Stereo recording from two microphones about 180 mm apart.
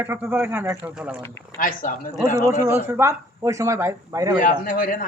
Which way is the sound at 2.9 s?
15° right (ahead or behind).